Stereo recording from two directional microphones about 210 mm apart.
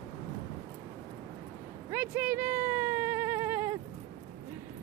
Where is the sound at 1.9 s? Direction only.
10° right (ahead or behind).